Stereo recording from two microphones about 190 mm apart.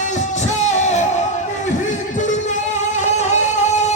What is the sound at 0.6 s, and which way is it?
Music, 40° left (ahead or behind).